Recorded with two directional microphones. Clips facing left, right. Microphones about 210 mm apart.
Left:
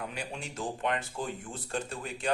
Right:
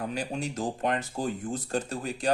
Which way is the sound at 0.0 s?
40° right (ahead or behind).